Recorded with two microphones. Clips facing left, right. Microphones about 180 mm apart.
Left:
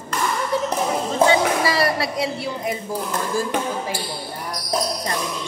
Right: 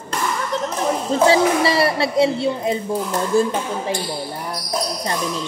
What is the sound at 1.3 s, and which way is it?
A child's voice, 25° right (ahead or behind).